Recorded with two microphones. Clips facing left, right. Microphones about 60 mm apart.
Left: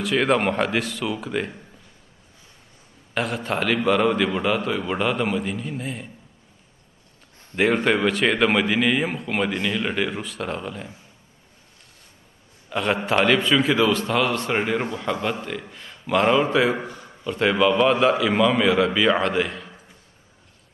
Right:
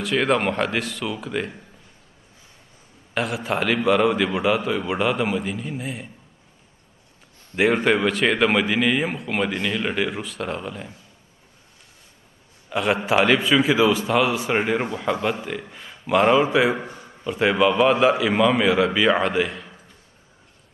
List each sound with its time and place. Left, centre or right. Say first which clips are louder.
0.0 s a man's voice: even; centre
3.2 s a man's voice: right 1 dB; centre
7.5 s a man's voice: right 1 dB; centre
12.6 s a man's voice: right 1 dB; centre
16.8 s a sound: left 1 dB; right
17.3 s a man's voice: even; centre